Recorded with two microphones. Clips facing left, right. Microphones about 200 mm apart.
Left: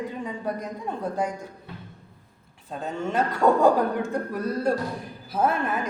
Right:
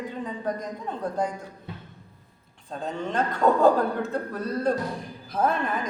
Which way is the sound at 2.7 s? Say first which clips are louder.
Left 1 dB; 5° left (ahead or behind).